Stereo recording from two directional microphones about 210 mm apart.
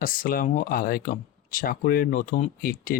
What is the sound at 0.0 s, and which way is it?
Speech, 40° left (ahead or behind).